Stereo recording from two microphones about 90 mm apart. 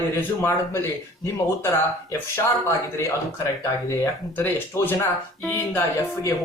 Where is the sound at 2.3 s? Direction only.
30° left (ahead or behind).